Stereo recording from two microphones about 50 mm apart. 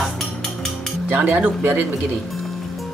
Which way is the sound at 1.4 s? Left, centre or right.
Right.